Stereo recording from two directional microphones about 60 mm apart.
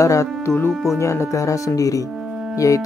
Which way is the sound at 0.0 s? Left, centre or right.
Left.